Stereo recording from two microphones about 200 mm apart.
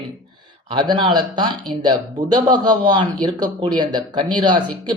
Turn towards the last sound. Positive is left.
turn(degrees=-20)  # may be behind; listen again after turning